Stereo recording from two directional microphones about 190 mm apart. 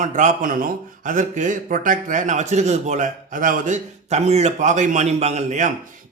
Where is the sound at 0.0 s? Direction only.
40° right (ahead or behind).